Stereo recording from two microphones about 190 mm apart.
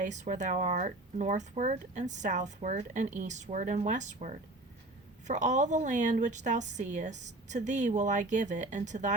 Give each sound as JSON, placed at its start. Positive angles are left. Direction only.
{"t": 0.0, "sound": "speech", "side_deg": -40}